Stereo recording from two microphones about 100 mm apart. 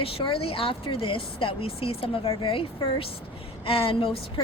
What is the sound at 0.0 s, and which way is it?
Speech, 65° left (ahead or behind).